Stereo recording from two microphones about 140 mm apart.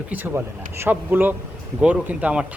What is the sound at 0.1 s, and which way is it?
A man's voice, 15° right (ahead or behind).